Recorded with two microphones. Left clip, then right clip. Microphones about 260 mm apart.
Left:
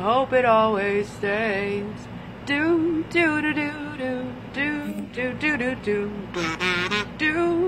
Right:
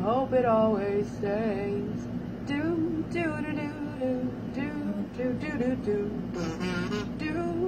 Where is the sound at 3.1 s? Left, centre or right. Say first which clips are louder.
Left 10 dB; left.